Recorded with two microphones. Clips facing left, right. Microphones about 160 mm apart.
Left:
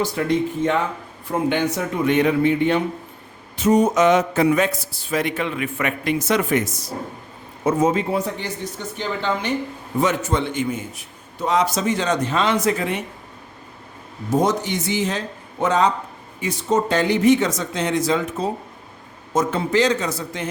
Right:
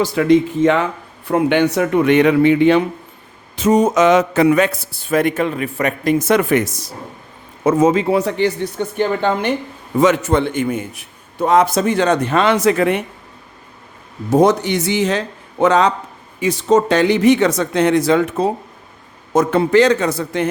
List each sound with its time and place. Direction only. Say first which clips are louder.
0.0 s speech: right 7 dB; 90° right
1.3 s a man's voice: right 6 dB; 75° right (ahead or behind)
7.6 s speech: right 5 dB; 90° right; by 9.6 s 55° right (ahead or behind)
10.0 s a man's voice: right 7 dB; 75° right (ahead or behind)
14.3 s a man's voice: right 7 dB; 70° right (ahead or behind)